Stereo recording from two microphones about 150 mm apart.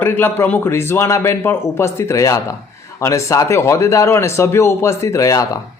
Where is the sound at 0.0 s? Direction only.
15° left (ahead or behind).